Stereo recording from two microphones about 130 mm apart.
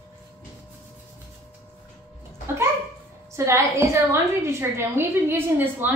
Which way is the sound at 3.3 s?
20° right (ahead or behind).